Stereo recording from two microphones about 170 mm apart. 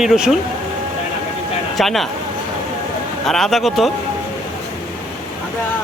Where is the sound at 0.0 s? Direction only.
Centre (ahead or behind).